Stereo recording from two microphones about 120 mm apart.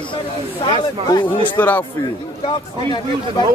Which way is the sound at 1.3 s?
45° left (ahead or behind).